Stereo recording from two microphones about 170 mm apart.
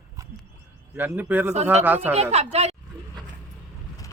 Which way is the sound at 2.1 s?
40° right (ahead or behind).